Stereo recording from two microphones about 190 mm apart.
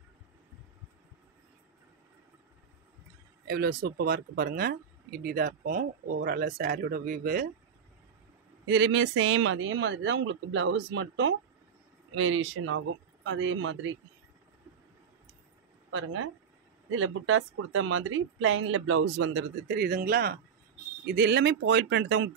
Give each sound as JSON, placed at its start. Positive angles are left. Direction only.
{"t": 3.4, "sound": "speech", "side_deg": -55}
{"t": 8.6, "sound": "speech", "side_deg": -70}
{"t": 15.9, "sound": "speech", "side_deg": -90}
{"t": 19.7, "sound": "speech", "side_deg": -50}